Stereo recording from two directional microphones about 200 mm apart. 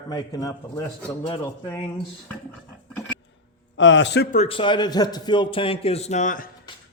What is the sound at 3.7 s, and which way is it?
Speech, 65° left (ahead or behind).